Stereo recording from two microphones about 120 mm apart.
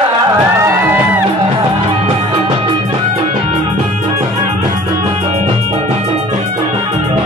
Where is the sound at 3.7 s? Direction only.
65° right (ahead or behind).